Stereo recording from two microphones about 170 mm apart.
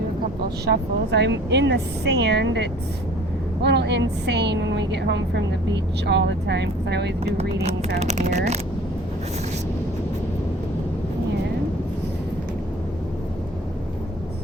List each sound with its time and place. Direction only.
0.6 s a woman's voice: 80° right
7.9 s speech: 40° right (ahead or behind)